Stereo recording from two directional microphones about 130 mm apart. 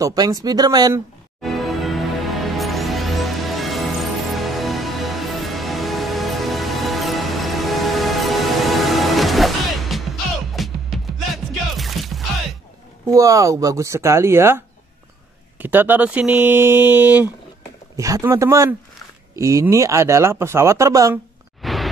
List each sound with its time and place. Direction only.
0.0 s speech: 30° right (ahead or behind)
1.4 s music: centre (ahead or behind)
13.1 s speech: 25° right (ahead or behind)
15.6 s speech: 15° right (ahead or behind)
17.9 s speech: 25° right (ahead or behind)
21.6 s a sound: centre (ahead or behind)